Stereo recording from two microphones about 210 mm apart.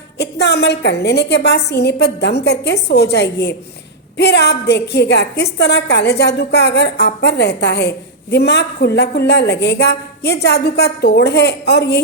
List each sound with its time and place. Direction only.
0.2 s a woman's voice: 50° left (ahead or behind)